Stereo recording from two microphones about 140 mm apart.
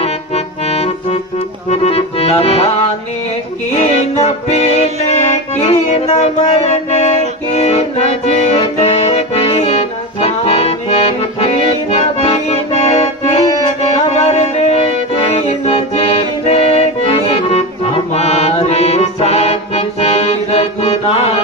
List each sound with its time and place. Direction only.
0.0 s music: 45° left (ahead or behind)
1.7 s accordion: 50° left (ahead or behind)
3.8 s music: 50° left (ahead or behind)
5.0 s accordion: 50° left (ahead or behind)
13.9 s music: 45° left (ahead or behind)